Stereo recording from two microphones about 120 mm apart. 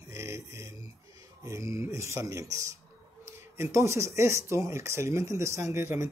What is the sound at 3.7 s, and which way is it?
Speech, 25° right (ahead or behind).